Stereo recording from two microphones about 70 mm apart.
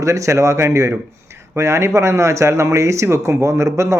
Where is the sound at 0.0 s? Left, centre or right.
Right.